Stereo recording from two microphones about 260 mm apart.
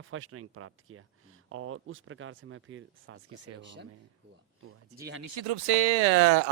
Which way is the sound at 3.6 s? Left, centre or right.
Right.